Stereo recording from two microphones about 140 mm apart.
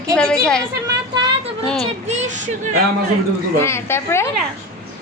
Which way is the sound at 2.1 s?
55° right (ahead or behind).